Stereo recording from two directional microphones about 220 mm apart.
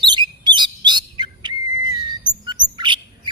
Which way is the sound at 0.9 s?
20° right (ahead or behind).